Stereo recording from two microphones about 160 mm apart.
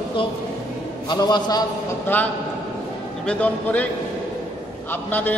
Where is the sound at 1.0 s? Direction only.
25° left (ahead or behind).